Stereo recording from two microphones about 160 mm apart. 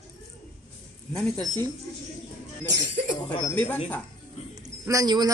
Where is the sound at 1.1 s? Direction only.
5° left (ahead or behind).